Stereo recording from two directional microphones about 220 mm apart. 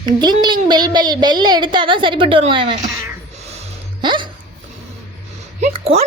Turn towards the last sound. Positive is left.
turn(degrees=-25)  # may be behind; listen again after turning